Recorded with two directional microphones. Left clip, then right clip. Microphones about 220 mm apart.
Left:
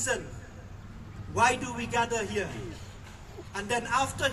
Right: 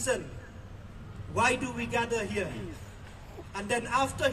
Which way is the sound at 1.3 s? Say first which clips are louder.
Left 2 dB; 15° right (ahead or behind).